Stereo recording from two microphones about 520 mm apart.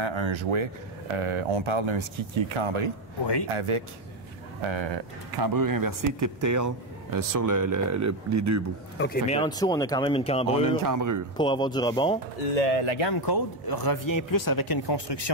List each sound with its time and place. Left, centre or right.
0.0 s speech: right
4.6 s speech: right
5.3 s speech: right
8.9 s speech: centre
10.8 s speech: right
11.3 s speech: centre
12.6 s speech: left
13.1 s speech: left